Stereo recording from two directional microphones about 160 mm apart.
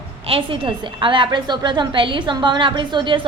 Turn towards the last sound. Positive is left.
turn(degrees=-30)  # may be behind; listen again after turning